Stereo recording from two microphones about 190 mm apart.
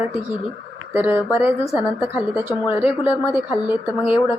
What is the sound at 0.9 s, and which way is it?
Speech, 10° right (ahead or behind).